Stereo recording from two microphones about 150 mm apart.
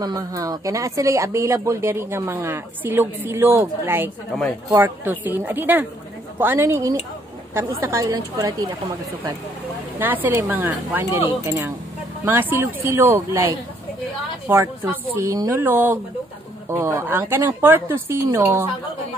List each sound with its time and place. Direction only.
0.0 s a woman's voice: 25° right (ahead or behind)
9.9 s speech: 10° right (ahead or behind)
14.5 s speech: 15° right (ahead or behind)